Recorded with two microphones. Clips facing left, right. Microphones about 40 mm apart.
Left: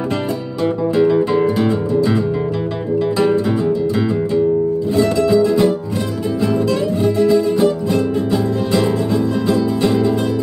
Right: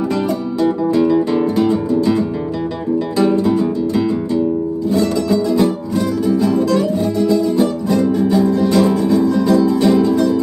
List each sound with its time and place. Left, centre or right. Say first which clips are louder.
0.9 s music: left 2 dB; left
1.6 s music: right 1 dB; left
3.3 s music: right 1 dB; left